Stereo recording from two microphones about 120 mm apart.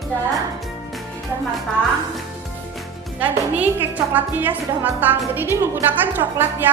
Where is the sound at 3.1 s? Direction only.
15° right (ahead or behind).